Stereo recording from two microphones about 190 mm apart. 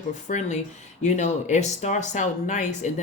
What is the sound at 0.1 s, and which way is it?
Speech, 40° left (ahead or behind).